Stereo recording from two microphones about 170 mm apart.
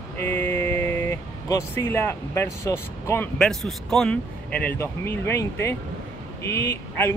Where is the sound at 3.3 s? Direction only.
5° left (ahead or behind).